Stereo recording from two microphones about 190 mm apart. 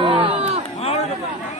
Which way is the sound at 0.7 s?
35° left (ahead or behind).